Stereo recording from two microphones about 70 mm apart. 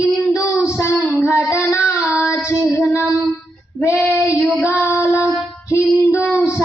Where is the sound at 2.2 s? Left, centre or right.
Left.